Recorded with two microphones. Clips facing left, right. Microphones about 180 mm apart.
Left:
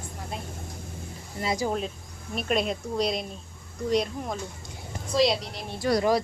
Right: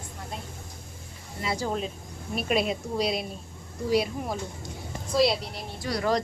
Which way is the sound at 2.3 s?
5° right (ahead or behind).